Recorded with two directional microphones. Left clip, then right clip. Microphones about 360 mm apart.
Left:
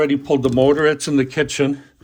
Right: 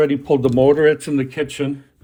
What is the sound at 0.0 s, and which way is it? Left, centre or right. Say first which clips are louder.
Speech: right 1 dB; centre.